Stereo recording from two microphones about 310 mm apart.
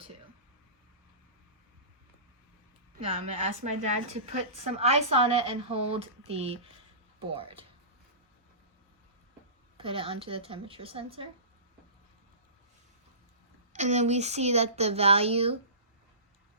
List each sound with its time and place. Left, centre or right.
3.1 s a woman's voice: centre
9.7 s a woman's voice: centre
13.7 s a woman's voice: right